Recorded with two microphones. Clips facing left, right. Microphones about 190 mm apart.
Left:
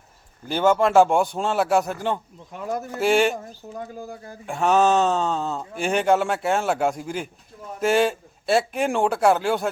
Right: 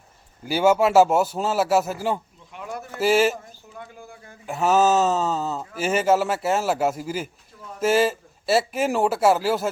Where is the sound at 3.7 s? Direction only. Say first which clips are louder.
Left 7 dB; 40° left (ahead or behind).